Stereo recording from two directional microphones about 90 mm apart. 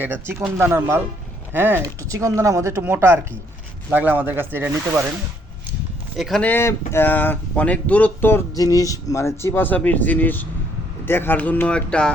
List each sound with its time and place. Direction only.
0.0 s speech: 25° right (ahead or behind)
2.0 s speech: 40° right (ahead or behind)
6.1 s speech: centre (ahead or behind)
6.4 s speech: 25° left (ahead or behind)
8.5 s speech: 40° left (ahead or behind); by 12.1 s 10° left (ahead or behind)